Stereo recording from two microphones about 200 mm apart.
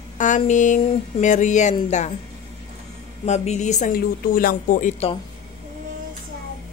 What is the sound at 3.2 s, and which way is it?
Speech, 35° left (ahead or behind).